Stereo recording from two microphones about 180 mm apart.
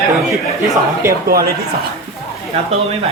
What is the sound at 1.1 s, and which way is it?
Speech, 55° right (ahead or behind).